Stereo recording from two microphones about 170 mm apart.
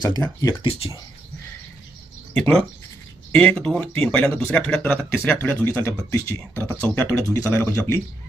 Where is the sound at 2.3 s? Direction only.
5° left (ahead or behind).